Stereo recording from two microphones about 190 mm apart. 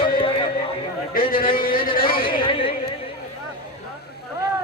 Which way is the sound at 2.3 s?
25° left (ahead or behind).